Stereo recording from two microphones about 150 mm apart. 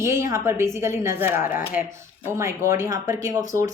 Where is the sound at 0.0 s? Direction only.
20° right (ahead or behind).